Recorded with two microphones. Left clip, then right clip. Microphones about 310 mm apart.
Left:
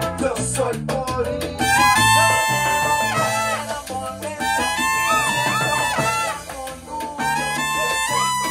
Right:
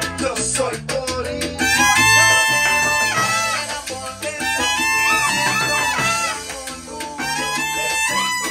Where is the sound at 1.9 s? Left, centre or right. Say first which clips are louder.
Right 2 dB; left.